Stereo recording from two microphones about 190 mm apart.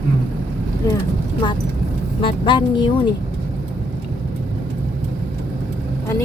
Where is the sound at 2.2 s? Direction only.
25° left (ahead or behind).